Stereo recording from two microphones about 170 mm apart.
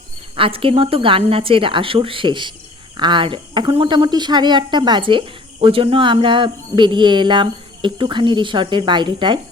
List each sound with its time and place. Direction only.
0.3 s a woman's voice: 30° right (ahead or behind)